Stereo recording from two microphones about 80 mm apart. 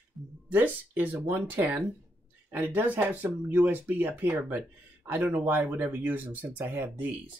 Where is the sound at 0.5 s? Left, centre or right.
Right.